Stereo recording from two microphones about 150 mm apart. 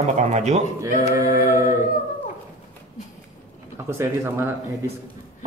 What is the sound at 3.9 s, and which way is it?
Speech, 15° right (ahead or behind).